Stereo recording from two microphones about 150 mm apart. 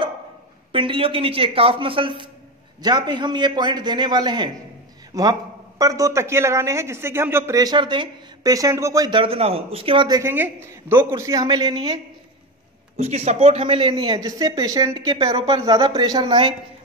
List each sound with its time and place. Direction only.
0.7 s a man's voice: 35° right (ahead or behind)
10.3 s a man's voice: 15° right (ahead or behind)
12.9 s speech: 45° right (ahead or behind)